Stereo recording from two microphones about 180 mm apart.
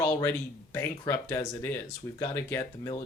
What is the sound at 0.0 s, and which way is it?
Speech, 15° left (ahead or behind).